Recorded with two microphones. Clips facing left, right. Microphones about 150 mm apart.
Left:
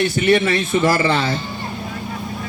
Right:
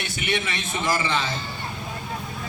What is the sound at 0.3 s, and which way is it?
A man's voice, 60° left (ahead or behind).